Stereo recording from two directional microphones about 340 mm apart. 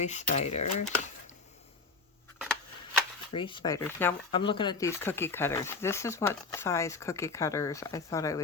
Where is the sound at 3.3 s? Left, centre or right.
Centre.